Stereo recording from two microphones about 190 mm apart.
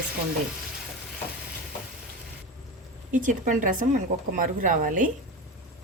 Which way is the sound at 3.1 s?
45° right (ahead or behind).